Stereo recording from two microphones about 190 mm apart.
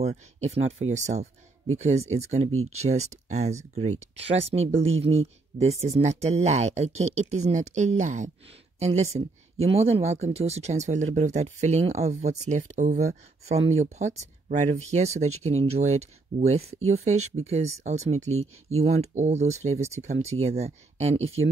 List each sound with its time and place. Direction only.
0.0 s speech: 35° right (ahead or behind)